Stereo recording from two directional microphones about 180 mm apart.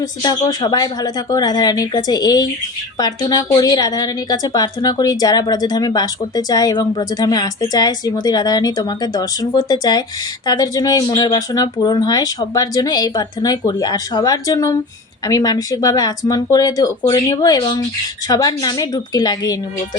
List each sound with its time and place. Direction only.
0.2 s a woman's voice: 25° left (ahead or behind)